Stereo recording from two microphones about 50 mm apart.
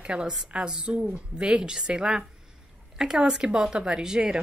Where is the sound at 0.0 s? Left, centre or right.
Right.